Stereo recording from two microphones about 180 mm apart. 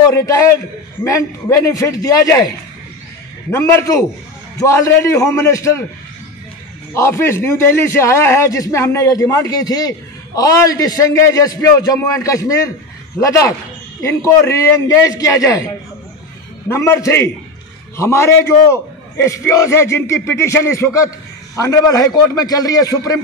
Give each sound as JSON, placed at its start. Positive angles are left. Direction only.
{"t": 0.1, "sound": "a man's voice", "side_deg": 15}
{"t": 3.5, "sound": "a man's voice", "side_deg": 15}
{"t": 6.9, "sound": "a man's voice", "side_deg": 15}